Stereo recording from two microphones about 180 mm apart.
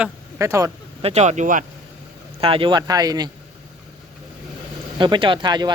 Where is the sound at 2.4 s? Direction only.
30° right (ahead or behind).